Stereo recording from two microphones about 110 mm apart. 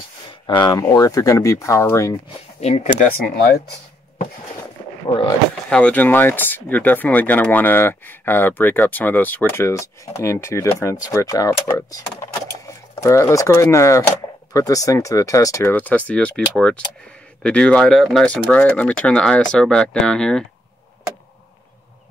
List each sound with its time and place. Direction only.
0.3 s a sound: 45° left (ahead or behind)
0.7 s speech: 30° left (ahead or behind)
2.6 s speech: 85° left
5.7 s speech: 10° left (ahead or behind); by 15.7 s 30° left (ahead or behind)
15.7 s speech: 15° left (ahead or behind)